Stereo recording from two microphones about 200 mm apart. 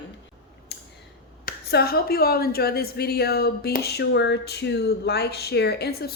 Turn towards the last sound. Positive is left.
turn(degrees=50)  # may be behind; listen again after turning